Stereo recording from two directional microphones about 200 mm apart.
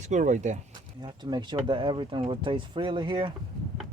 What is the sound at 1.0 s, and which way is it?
Speech, 20° right (ahead or behind).